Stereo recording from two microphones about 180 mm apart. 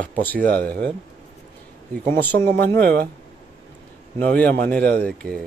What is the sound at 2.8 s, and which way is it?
Speech, 65° right (ahead or behind).